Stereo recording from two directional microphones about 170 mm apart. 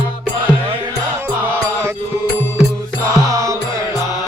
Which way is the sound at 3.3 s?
20° right (ahead or behind).